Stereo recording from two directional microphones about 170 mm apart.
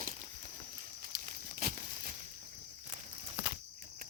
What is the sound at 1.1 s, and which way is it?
Tearing, 60° right (ahead or behind).